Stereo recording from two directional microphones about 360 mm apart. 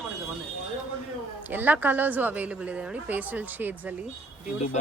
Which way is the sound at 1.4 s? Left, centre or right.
Centre.